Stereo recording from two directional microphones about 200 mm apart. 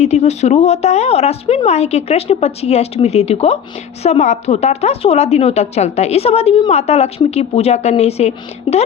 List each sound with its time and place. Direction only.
0.0 s a woman's voice: 35° left (ahead or behind)